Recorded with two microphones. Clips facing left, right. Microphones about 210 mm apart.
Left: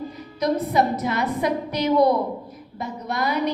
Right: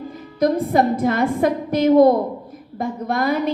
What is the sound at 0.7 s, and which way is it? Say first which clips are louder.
A woman's voice: right 4 dB; 50° right (ahead or behind).